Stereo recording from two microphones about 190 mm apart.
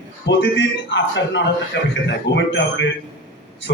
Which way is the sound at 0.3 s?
70° left (ahead or behind).